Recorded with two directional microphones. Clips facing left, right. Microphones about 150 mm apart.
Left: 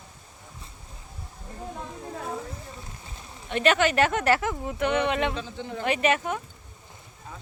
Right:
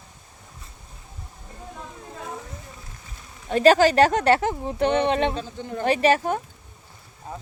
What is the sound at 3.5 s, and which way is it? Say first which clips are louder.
Speech: right 6 dB; 35° right (ahead or behind).